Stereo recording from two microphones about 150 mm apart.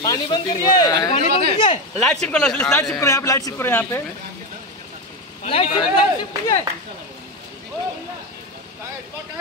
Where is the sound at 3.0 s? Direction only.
20° left (ahead or behind).